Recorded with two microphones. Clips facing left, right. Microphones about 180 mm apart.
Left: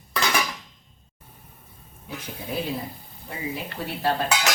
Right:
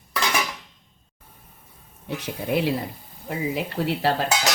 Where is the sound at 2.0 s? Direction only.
75° right (ahead or behind).